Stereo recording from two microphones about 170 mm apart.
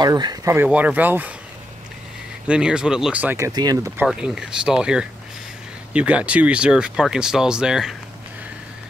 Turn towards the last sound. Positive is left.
turn(degrees=-5)  # may be behind; listen again after turning